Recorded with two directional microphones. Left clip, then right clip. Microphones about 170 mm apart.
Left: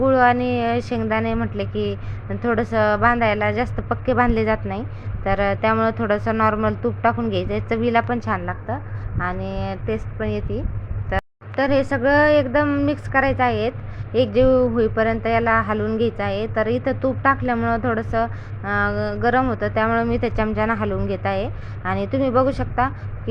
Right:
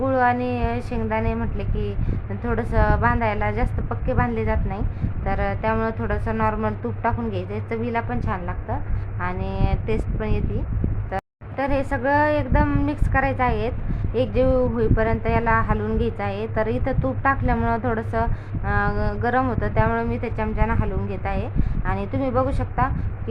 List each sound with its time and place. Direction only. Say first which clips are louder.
0.0 s a woman's voice: left 4 dB; 15° left (ahead or behind)